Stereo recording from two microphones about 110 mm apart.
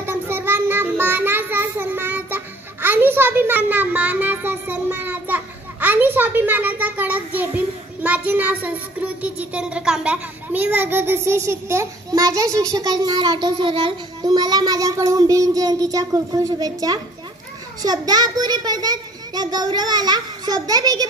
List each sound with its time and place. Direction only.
0.0 s child singing: 20° right (ahead or behind)
12.1 s a child's voice: 35° right (ahead or behind)